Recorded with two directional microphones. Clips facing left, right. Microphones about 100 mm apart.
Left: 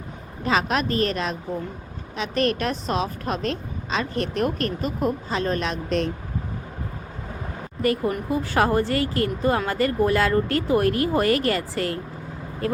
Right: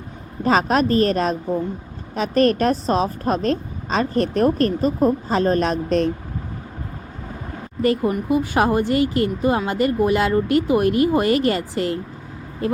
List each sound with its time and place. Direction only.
0.4 s a woman's voice: 40° right (ahead or behind)
7.8 s speech: 25° right (ahead or behind)